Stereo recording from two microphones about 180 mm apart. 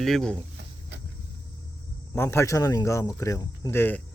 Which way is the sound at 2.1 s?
15° left (ahead or behind).